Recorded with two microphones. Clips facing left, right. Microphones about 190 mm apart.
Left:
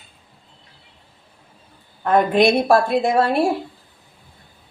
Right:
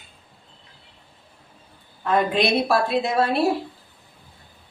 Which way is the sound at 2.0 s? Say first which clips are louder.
Left 5 dB; 50° left (ahead or behind).